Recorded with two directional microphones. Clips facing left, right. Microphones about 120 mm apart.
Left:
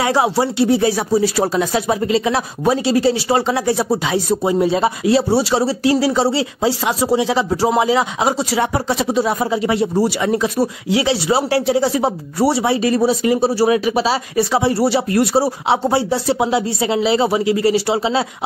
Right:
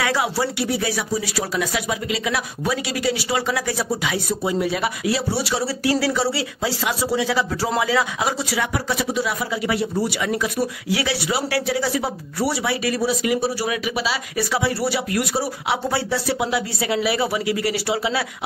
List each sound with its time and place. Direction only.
0.0 s speech: 25° left (ahead or behind)